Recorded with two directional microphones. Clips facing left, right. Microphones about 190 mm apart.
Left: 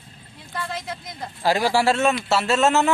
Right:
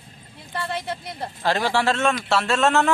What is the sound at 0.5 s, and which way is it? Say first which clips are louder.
Speech: right 2 dB; 30° right (ahead or behind).